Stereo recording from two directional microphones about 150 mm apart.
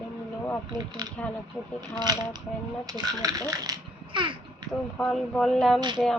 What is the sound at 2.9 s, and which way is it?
Speech, 25° right (ahead or behind).